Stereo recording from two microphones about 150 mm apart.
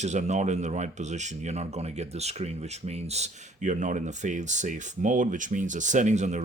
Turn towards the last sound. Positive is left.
turn(degrees=-50)  # may be behind; listen again after turning